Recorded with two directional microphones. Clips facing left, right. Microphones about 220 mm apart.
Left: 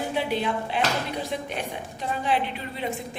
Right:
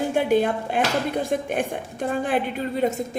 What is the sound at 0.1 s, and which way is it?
Speech, 50° right (ahead or behind).